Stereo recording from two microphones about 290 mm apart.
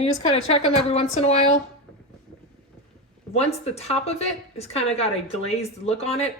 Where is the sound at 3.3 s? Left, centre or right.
Left.